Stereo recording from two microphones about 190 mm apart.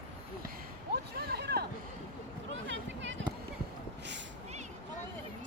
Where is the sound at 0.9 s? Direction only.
60° right (ahead or behind).